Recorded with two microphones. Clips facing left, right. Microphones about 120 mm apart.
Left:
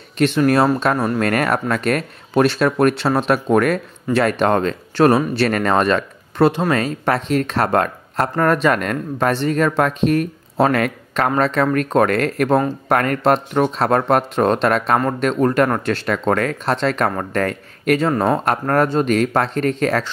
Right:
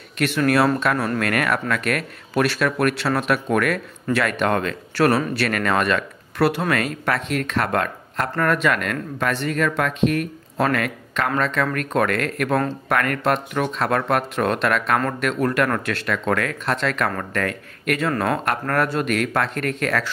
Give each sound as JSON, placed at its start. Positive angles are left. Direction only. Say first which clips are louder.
{"t": 0.2, "sound": "speech", "louder": "left 4 dB", "side_deg": 25}
{"t": 1.2, "sound": "speech", "louder": "left 4 dB", "side_deg": 35}